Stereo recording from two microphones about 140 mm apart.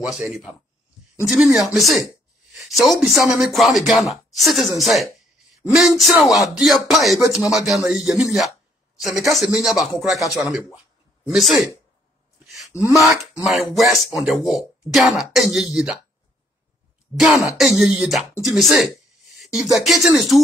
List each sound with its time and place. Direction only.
0.0 s speech: centre (ahead or behind)
12.4 s wail: centre (ahead or behind)
12.7 s a sound: 20° left (ahead or behind)
13.0 s speech: centre (ahead or behind)
17.1 s speech: 5° right (ahead or behind)
18.4 s a sound: centre (ahead or behind)
19.8 s speech: centre (ahead or behind)